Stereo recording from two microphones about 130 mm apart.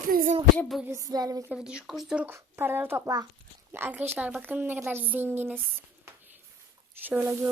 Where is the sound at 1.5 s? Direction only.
10° right (ahead or behind).